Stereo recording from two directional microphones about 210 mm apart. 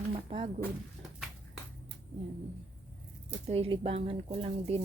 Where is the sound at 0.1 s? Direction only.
25° right (ahead or behind).